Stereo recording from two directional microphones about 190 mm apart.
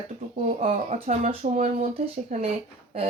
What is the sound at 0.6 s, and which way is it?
Speech, 40° right (ahead or behind).